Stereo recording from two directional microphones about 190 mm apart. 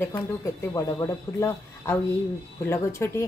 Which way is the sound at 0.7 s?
15° left (ahead or behind).